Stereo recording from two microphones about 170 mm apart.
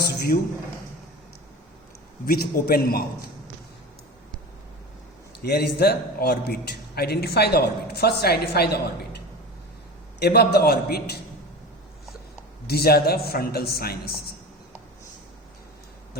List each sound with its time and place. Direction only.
2.2 s a man's voice: 65° left (ahead or behind)
5.4 s a man's voice: 70° left (ahead or behind)
10.2 s a man's voice: 70° left (ahead or behind)
12.6 s a man's voice: 65° left (ahead or behind)